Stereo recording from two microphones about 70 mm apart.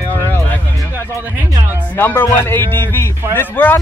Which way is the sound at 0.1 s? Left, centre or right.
Left.